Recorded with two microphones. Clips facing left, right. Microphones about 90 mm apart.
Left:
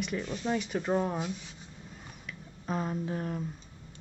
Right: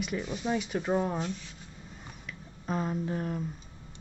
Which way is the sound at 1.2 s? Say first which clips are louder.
Right 1 dB; 15° left (ahead or behind).